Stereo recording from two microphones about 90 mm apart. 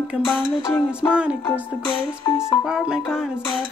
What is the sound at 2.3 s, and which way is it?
Music, 5° right (ahead or behind).